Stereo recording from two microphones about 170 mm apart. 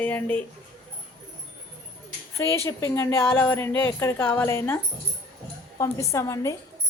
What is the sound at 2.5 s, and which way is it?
A woman's voice, 15° left (ahead or behind).